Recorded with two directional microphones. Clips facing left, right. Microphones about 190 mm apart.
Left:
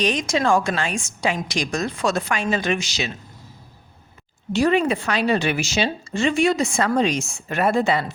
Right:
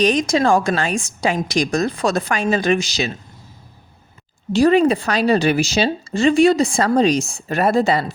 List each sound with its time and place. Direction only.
0.0 s speech: 40° right (ahead or behind)
4.5 s speech: 35° right (ahead or behind)